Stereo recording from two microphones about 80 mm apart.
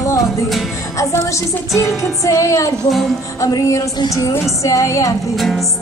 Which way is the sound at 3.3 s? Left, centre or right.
Left.